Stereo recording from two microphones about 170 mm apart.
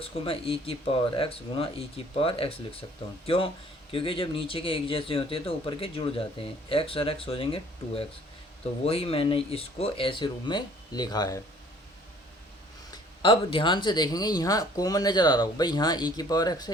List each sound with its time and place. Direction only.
0.0 s speech: 35° left (ahead or behind)
13.2 s speech: 30° left (ahead or behind)